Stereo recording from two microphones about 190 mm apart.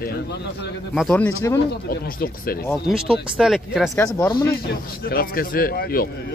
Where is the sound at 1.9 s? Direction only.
50° left (ahead or behind).